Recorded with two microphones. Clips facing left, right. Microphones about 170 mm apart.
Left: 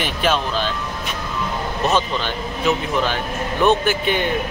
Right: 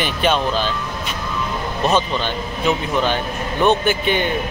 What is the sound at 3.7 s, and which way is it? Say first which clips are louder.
Speech: right 1 dB; centre (ahead or behind).